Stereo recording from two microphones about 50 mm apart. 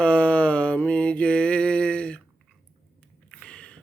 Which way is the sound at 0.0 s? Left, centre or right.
Left.